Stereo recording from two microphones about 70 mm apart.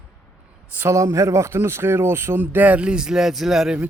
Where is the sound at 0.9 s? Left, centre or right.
Right; by 3.8 s centre.